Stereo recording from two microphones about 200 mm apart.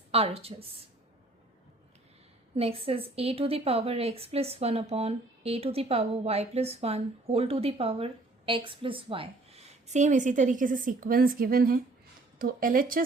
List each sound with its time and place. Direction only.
0.1 s speech: 30° right (ahead or behind)
2.6 s a woman's voice: 30° right (ahead or behind); by 13.1 s 45° right (ahead or behind)